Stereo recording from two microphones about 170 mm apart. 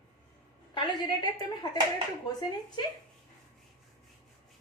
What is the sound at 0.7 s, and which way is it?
Speech, 25° left (ahead or behind).